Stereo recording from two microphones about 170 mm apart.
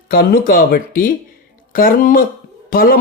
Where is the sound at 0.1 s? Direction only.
60° left (ahead or behind).